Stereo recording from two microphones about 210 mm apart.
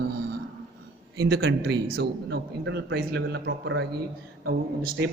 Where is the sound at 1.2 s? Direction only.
50° right (ahead or behind).